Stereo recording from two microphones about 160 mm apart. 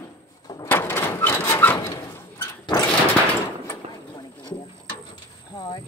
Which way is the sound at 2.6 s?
20° left (ahead or behind).